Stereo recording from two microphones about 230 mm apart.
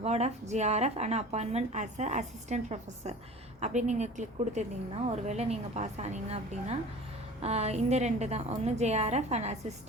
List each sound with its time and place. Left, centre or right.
0.0 s a woman's voice: right